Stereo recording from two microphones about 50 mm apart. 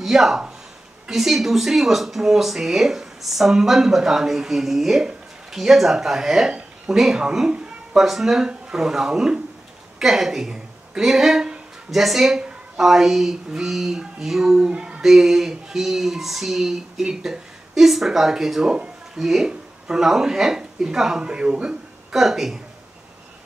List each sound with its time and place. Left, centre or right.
0.0 s a woman's voice: centre
12.4 s a sound: centre
12.8 s speech: centre
15.0 s speech: centre
22.1 s speech: centre